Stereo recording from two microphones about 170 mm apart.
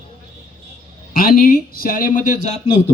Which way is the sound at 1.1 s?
60° left (ahead or behind).